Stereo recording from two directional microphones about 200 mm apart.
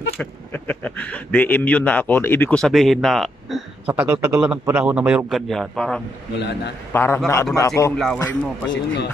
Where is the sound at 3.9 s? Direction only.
10° right (ahead or behind).